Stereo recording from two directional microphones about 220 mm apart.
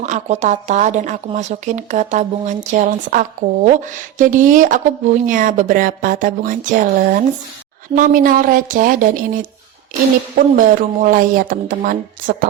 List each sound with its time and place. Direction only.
0.0 s speech: 35° right (ahead or behind)
7.9 s speech: 40° right (ahead or behind)